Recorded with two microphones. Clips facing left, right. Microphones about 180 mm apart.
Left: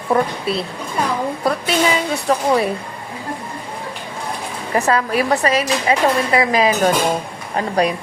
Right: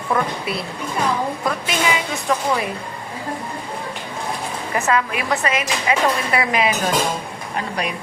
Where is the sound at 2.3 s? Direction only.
35° left (ahead or behind).